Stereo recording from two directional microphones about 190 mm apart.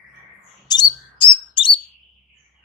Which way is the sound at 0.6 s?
25° left (ahead or behind).